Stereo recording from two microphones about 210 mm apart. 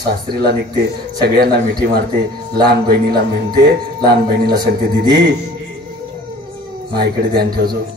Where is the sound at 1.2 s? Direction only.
50° right (ahead or behind).